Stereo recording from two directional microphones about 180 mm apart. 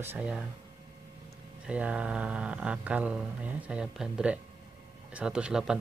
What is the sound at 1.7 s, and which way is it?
Speech, 5° right (ahead or behind).